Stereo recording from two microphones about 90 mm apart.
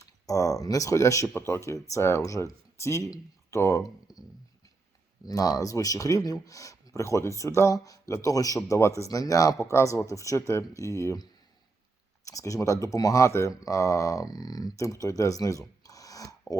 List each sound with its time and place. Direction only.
0.0 s speech: 40° left (ahead or behind)
5.2 s speech: 40° left (ahead or behind)